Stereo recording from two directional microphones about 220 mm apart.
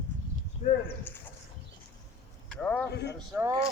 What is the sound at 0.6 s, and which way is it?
Horse, 30° left (ahead or behind).